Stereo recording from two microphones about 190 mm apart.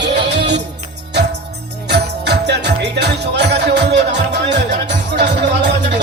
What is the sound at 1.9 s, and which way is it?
Music, 60° right (ahead or behind).